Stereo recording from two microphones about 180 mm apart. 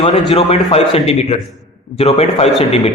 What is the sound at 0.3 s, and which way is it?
A man's voice, 35° left (ahead or behind).